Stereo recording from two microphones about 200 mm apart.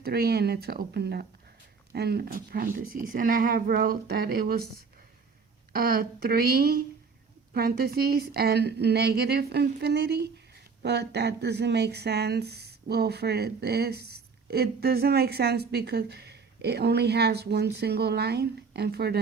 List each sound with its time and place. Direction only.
0.0 s a woman's voice: 50° right (ahead or behind)
5.7 s a woman's voice: 50° right (ahead or behind)